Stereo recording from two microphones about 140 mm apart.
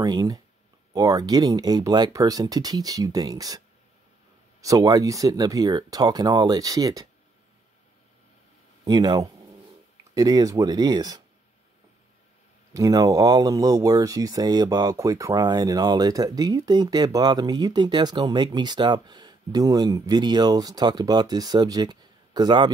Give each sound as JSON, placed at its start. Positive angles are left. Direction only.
{"t": 0.0, "sound": "speech", "side_deg": -25}
{"t": 8.8, "sound": "speech", "side_deg": -30}
{"t": 12.7, "sound": "speech", "side_deg": -25}